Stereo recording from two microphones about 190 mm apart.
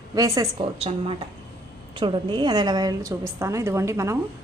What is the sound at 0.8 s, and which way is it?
A woman's voice, 30° right (ahead or behind).